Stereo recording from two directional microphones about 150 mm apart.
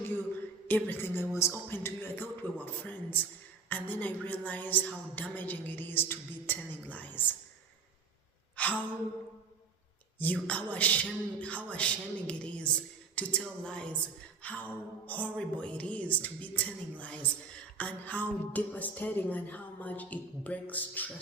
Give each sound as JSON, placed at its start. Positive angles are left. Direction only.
{"t": 0.7, "sound": "a man's voice", "side_deg": 15}
{"t": 8.6, "sound": "a sound", "side_deg": 10}
{"t": 10.2, "sound": "a man's voice", "side_deg": 10}